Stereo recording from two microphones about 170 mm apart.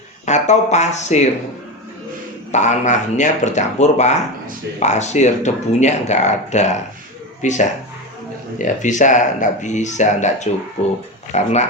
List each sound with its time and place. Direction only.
0.3 s speech: 45° left (ahead or behind)
2.5 s speech: 45° left (ahead or behind)